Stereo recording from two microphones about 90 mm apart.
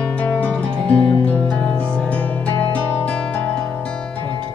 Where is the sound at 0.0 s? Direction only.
15° left (ahead or behind).